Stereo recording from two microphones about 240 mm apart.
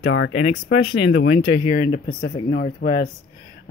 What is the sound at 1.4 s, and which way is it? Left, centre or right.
Speech, left.